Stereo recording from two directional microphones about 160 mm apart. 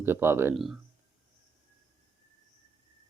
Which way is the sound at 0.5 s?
Centre (ahead or behind).